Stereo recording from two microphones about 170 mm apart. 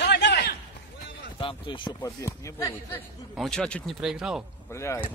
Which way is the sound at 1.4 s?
30° left (ahead or behind).